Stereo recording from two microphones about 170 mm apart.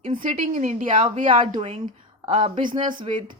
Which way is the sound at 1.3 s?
30° right (ahead or behind).